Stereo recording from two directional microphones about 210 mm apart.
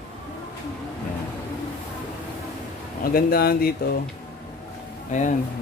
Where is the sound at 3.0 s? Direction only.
45° left (ahead or behind).